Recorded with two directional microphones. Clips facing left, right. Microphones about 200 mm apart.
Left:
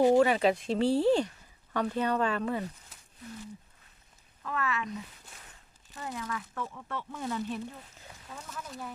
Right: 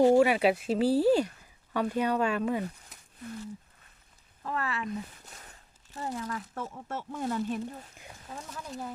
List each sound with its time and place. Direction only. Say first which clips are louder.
0.2 s speech: right 1 dB; 10° right (ahead or behind)
4.4 s speech: even; 35° right (ahead or behind)
6.0 s speech: right 2 dB; 35° right (ahead or behind)